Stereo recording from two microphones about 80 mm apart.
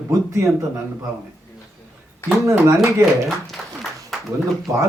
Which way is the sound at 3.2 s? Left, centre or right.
Centre.